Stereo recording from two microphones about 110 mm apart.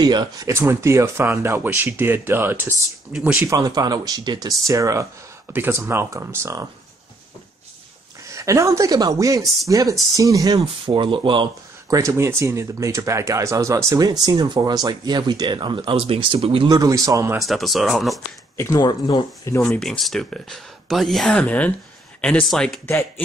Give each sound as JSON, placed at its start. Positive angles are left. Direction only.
{"t": 0.0, "sound": "speech", "side_deg": -40}
{"t": 0.5, "sound": "speech", "side_deg": -25}
{"t": 3.1, "sound": "speech", "side_deg": -5}
{"t": 3.4, "sound": "speech", "side_deg": -35}
{"t": 8.3, "sound": "speech", "side_deg": -30}
{"t": 10.6, "sound": "speech", "side_deg": -50}
{"t": 11.9, "sound": "speech", "side_deg": -30}
{"t": 16.6, "sound": "speech", "side_deg": -35}
{"t": 17.4, "sound": "speech", "side_deg": 0}
{"t": 18.8, "sound": "speech", "side_deg": 40}
{"t": 19.5, "sound": "speech", "side_deg": 30}
{"t": 19.8, "sound": "speech", "side_deg": 0}
{"t": 22.8, "sound": "speech", "side_deg": 20}